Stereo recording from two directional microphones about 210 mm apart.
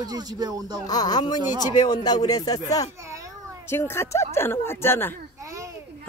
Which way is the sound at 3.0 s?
15° right (ahead or behind).